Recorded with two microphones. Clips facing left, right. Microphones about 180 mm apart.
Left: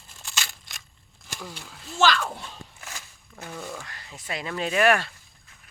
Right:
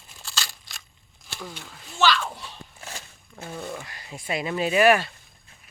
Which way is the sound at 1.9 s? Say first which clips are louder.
Even; 45° left (ahead or behind).